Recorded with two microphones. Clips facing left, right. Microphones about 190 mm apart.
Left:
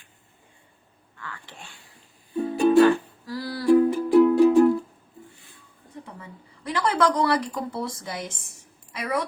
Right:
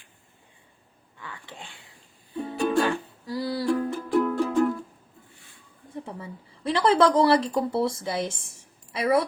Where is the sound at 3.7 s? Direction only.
10° left (ahead or behind).